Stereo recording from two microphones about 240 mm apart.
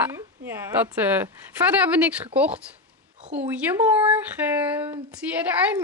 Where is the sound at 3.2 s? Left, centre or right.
Right.